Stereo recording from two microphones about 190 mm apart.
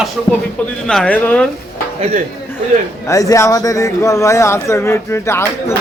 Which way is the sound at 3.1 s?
15° left (ahead or behind).